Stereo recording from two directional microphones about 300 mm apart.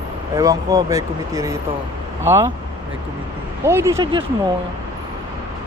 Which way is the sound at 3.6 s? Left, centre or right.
Centre.